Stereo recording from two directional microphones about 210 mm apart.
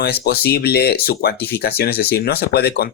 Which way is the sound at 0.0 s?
50° left (ahead or behind).